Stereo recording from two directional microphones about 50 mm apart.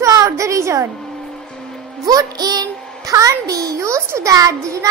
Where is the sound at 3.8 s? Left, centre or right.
Right.